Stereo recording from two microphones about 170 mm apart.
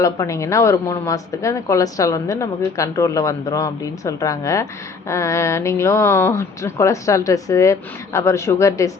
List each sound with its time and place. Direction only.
0.0 s speech: 20° left (ahead or behind)